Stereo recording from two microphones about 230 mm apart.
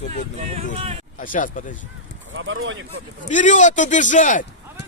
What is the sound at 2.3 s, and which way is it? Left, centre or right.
Speech, right.